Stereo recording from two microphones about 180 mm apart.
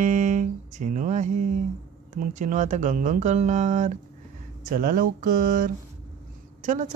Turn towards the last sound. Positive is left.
turn(degrees=-45)  # may be behind; listen again after turning